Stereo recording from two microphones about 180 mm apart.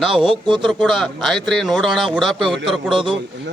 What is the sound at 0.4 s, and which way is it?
Speech, 25° right (ahead or behind).